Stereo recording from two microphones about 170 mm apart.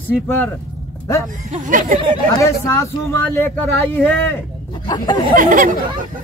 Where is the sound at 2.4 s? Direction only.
15° left (ahead or behind).